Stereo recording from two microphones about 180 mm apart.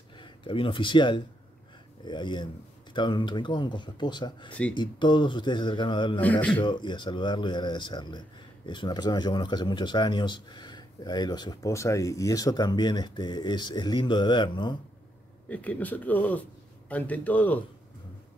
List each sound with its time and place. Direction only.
0.2 s speech: 30° left (ahead or behind)
15.4 s speech: 5° left (ahead or behind)